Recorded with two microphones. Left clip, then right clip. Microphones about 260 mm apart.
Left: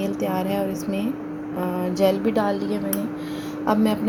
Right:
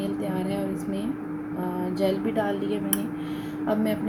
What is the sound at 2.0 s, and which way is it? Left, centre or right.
Speech, left.